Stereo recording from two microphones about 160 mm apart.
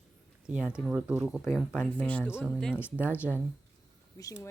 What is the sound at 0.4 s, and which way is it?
Speech, 5° right (ahead or behind).